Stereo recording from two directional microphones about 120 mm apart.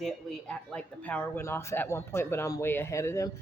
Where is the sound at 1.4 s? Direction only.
25° left (ahead or behind).